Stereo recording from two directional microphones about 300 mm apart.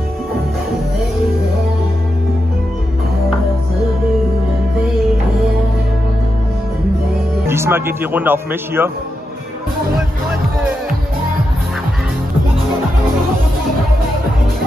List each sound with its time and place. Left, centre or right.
7.4 s a man's voice: centre